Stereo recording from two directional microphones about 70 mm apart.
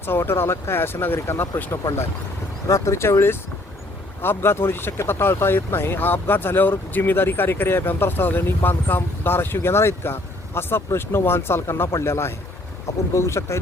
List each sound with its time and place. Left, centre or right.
0.0 s speech: left
2.6 s speech: left